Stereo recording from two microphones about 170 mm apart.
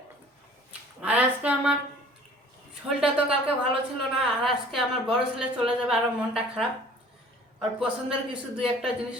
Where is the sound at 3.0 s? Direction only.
5° right (ahead or behind).